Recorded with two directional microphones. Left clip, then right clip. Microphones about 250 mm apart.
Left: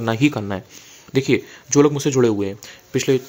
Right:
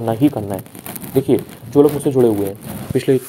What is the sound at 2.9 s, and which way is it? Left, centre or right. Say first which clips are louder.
Speech: right 3 dB; centre.